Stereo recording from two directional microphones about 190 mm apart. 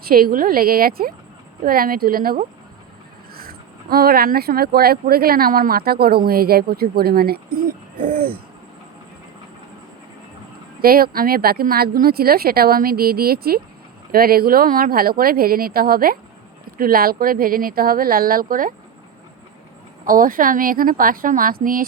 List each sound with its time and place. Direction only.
0.0 s speech: 50° right (ahead or behind)
10.8 s speech: 50° right (ahead or behind)
20.1 s speech: 45° right (ahead or behind)